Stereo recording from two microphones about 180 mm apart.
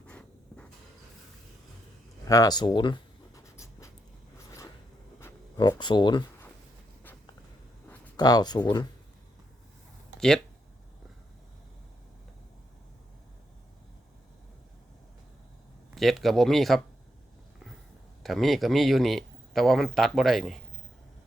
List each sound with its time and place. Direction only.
0.1 s writing: 5° left (ahead or behind)
2.2 s writing: 20° left (ahead or behind)
5.5 s speech: 25° left (ahead or behind)
8.1 s speech: 20° left (ahead or behind)
10.2 s speech: 5° left (ahead or behind)
16.0 s speech: centre (ahead or behind)
18.2 s speech: centre (ahead or behind)